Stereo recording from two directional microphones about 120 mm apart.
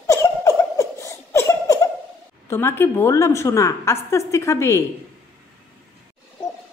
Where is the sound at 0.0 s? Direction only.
25° left (ahead or behind).